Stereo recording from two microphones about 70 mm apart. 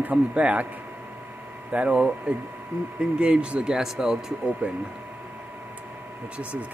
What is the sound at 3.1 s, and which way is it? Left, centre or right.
Speech, centre.